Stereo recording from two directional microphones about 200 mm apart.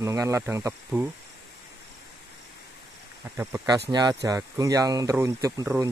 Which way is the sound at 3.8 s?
20° right (ahead or behind).